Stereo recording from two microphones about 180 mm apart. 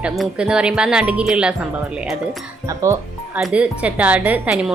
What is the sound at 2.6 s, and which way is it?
Speech, 15° right (ahead or behind).